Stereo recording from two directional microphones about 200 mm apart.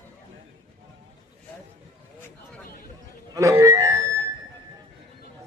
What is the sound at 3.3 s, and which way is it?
Music, 15° right (ahead or behind).